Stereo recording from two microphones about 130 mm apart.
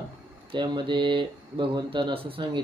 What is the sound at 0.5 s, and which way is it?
Speech, 40° right (ahead or behind).